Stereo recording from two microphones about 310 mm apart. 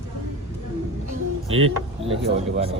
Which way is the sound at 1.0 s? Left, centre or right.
Right.